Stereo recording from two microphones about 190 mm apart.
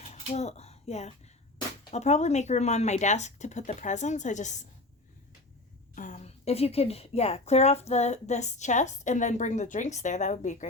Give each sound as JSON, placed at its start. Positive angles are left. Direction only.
{"t": 0.0, "sound": "a sound", "side_deg": 35}
{"t": 1.9, "sound": "speech", "side_deg": 35}
{"t": 5.9, "sound": "speech", "side_deg": 40}